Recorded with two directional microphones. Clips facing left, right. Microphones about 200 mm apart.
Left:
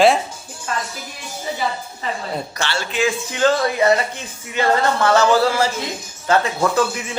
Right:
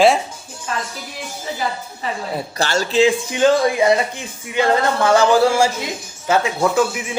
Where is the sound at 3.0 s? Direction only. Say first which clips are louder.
Right 5 dB; 15° right (ahead or behind).